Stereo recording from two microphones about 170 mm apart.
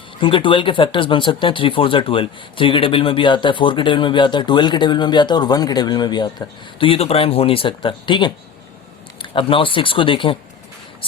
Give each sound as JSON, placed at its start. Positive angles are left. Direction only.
{"t": 0.2, "sound": "speech", "side_deg": 30}